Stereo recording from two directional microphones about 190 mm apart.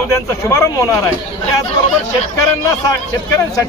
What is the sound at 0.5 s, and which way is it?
Speech, 15° left (ahead or behind).